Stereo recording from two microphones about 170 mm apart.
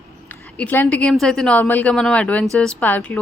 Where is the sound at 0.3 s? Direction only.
10° left (ahead or behind).